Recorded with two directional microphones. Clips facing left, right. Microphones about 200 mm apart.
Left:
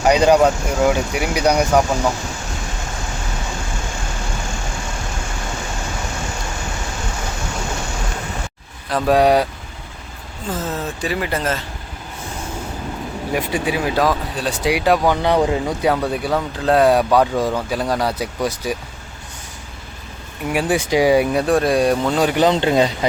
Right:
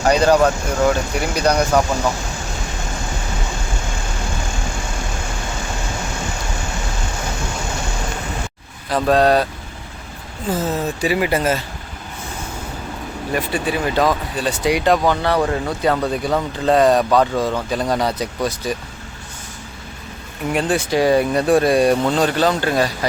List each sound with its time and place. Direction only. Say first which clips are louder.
0.1 s speech: left 1 dB; 15° left (ahead or behind)
8.9 s speech: even; centre (ahead or behind)
9.1 s speech: left 1 dB; 10° left (ahead or behind)
10.5 s speech: right 4 dB; 10° right (ahead or behind)
13.3 s speech: even; 10° left (ahead or behind)
20.5 s speech: left 1 dB; 10° left (ahead or behind)
21.4 s speech: right 2 dB; centre (ahead or behind)
22.2 s speech: left 2 dB; 15° left (ahead or behind)